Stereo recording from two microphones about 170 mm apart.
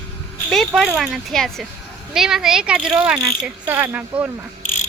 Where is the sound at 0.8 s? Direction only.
Centre (ahead or behind).